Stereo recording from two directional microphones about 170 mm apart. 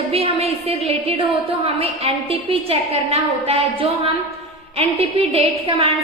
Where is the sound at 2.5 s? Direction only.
35° right (ahead or behind).